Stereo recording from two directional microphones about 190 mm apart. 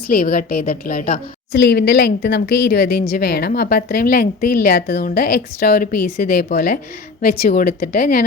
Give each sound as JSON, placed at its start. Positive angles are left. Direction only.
{"t": 0.1, "sound": "a woman's voice", "side_deg": 50}